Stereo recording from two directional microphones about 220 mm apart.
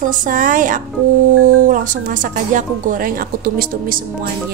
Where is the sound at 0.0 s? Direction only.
35° right (ahead or behind).